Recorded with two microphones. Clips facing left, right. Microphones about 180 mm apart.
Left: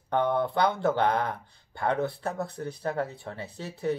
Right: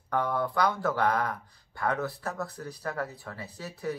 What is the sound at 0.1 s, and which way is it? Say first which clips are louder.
Speech: left 3 dB; 25° left (ahead or behind).